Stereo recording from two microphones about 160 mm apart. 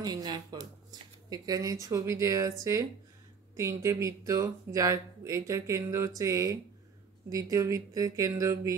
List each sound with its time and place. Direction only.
0.0 s speech: 25° right (ahead or behind)
3.5 s speech: 20° right (ahead or behind)